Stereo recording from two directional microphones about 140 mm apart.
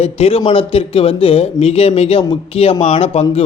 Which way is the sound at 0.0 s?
45° left (ahead or behind).